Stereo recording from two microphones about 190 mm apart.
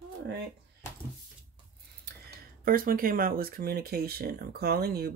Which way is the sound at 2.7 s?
50° right (ahead or behind).